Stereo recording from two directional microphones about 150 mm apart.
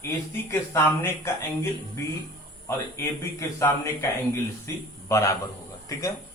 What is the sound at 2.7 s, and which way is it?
A man's voice, 20° left (ahead or behind).